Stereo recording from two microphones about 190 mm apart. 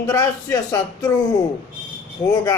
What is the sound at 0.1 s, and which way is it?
Speech, 15° left (ahead or behind).